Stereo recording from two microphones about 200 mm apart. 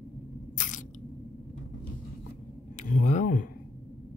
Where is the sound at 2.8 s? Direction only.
40° left (ahead or behind).